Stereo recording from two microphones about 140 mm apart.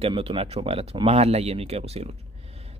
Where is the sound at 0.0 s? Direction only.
40° right (ahead or behind).